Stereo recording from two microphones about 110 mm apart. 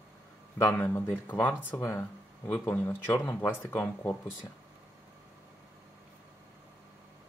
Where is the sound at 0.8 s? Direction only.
20° left (ahead or behind).